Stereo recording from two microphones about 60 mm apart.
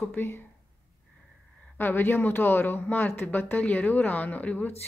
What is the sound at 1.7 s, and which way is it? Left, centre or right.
A woman's voice, left.